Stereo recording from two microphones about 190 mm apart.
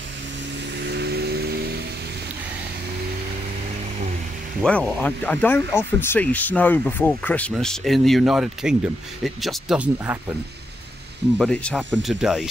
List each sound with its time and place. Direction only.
0.7 s vehicle: 60° right (ahead or behind)
4.6 s speech: 5° left (ahead or behind); by 10.3 s 10° right (ahead or behind)
11.3 s speech: 5° left (ahead or behind)